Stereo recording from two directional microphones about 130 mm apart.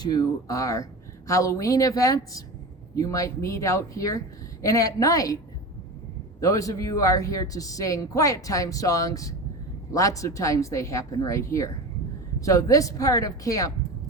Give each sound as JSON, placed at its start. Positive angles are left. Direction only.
{"t": 0.0, "sound": "a woman's voice", "side_deg": 30}
{"t": 6.4, "sound": "a woman's voice", "side_deg": 25}